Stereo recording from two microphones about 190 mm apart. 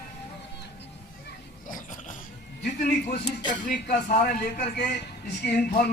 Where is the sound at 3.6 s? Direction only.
45° left (ahead or behind).